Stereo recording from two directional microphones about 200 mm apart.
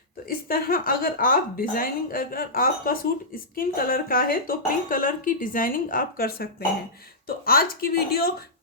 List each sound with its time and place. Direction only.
0.3 s speech: 50° left (ahead or behind)